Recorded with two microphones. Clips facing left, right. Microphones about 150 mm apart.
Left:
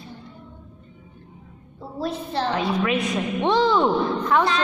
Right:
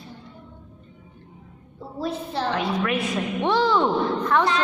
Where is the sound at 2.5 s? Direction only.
15° left (ahead or behind).